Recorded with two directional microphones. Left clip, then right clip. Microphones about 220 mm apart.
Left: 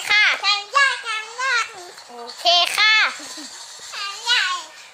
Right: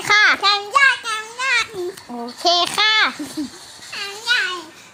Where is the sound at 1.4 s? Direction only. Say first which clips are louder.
Right 2 dB; 30° right (ahead or behind).